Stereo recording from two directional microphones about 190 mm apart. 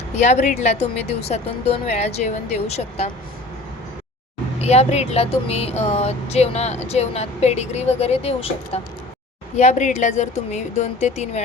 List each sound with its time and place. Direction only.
0.2 s speech: 40° left (ahead or behind)
4.6 s speech: 35° left (ahead or behind)